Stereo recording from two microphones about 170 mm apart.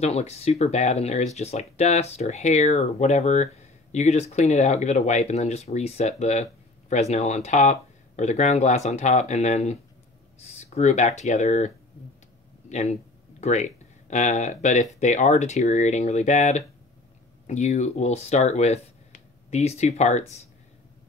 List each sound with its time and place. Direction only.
0.0 s speech: 40° left (ahead or behind)